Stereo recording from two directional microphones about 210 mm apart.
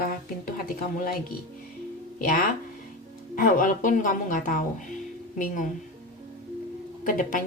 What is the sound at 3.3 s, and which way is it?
Speech, 40° left (ahead or behind).